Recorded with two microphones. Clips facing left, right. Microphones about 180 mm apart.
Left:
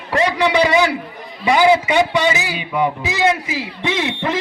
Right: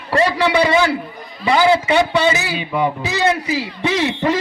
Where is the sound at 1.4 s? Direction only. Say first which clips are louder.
Left 1 dB; 15° left (ahead or behind).